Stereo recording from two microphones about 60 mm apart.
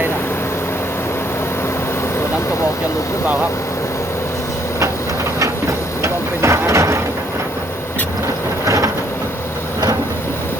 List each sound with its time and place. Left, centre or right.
6.0 s vehicle: right
8.6 s vehicle: right